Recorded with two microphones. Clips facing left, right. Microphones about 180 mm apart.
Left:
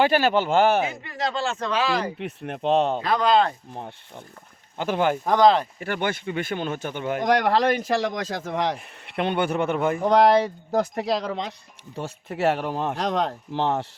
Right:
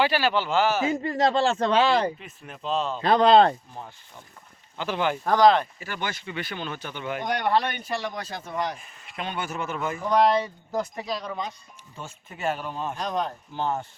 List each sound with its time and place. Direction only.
0.0 s speech: 45° left (ahead or behind)
1.0 s speech: 35° right (ahead or behind)
2.1 s speech: 65° left (ahead or behind)
3.0 s speech: 30° right (ahead or behind)
4.8 s speech: 50° left (ahead or behind)
5.2 s speech: 15° left (ahead or behind)
5.8 s speech: 55° left (ahead or behind)
7.3 s speech: 90° left